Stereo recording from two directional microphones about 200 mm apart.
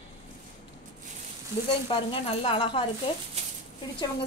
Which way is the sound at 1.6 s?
25° left (ahead or behind).